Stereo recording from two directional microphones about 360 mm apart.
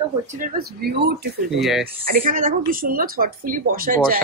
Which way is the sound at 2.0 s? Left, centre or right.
Right.